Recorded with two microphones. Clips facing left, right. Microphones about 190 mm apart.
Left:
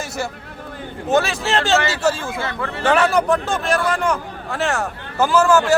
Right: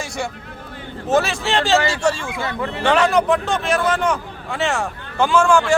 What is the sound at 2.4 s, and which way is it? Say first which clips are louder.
Speech: right 1 dB; 20° right (ahead or behind).